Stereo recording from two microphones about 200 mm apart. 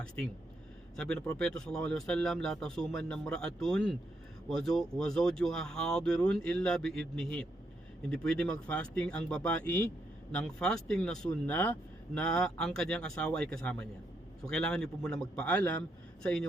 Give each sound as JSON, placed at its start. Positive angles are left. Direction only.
{"t": 0.9, "sound": "speech", "side_deg": 5}
{"t": 8.1, "sound": "speech", "side_deg": 5}